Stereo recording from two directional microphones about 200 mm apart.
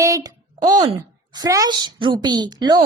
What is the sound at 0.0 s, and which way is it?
A woman's voice, 15° right (ahead or behind).